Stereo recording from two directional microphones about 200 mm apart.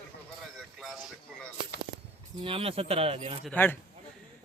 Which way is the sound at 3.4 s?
10° left (ahead or behind).